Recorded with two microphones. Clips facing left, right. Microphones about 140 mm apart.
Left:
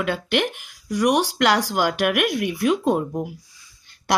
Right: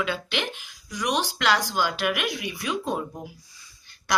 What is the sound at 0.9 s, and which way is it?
A woman's voice, 70° left (ahead or behind).